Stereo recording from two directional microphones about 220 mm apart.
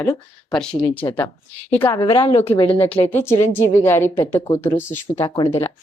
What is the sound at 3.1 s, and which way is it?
A woman's voice, 10° left (ahead or behind).